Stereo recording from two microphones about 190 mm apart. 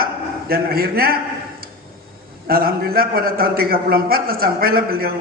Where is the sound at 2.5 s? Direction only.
50° right (ahead or behind).